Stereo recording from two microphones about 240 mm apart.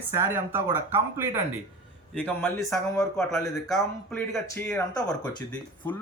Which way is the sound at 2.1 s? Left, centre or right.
Centre.